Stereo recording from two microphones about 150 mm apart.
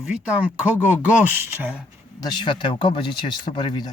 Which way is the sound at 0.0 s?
10° right (ahead or behind).